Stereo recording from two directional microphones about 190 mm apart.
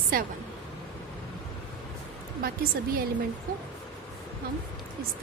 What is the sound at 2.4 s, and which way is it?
Speech, 50° right (ahead or behind).